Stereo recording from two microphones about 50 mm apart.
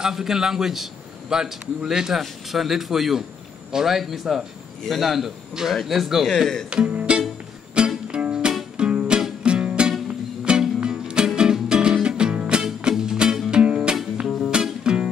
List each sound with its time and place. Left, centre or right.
0.0 s a man's voice: centre
6.2 s speech: centre
6.7 s music: right